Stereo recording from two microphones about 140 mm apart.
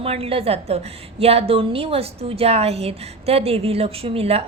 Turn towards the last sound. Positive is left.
turn(degrees=-45)  # may be behind; listen again after turning